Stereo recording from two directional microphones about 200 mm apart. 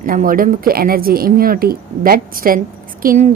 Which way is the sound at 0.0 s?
45° right (ahead or behind).